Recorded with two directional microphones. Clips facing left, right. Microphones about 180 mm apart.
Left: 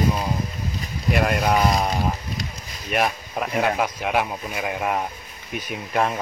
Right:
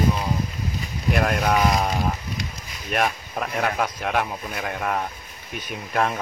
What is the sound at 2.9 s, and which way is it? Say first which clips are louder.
A man's voice: left 1 dB; 5° left (ahead or behind).